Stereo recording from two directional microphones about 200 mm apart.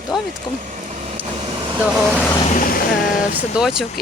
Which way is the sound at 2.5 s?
45° left (ahead or behind).